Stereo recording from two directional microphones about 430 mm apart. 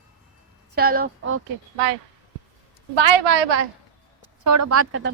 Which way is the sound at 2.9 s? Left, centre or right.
Right.